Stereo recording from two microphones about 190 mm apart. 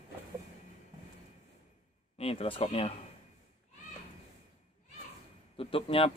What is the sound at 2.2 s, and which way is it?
Speech, 30° left (ahead or behind).